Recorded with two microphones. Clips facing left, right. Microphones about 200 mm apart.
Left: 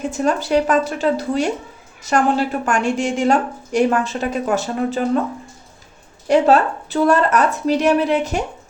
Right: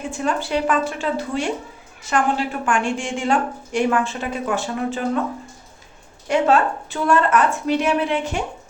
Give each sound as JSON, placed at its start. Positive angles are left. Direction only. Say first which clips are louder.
{"t": 0.1, "sound": "a woman's voice", "louder": "left 4 dB", "side_deg": 40}
{"t": 6.2, "sound": "a woman's voice", "louder": "left 3 dB", "side_deg": 35}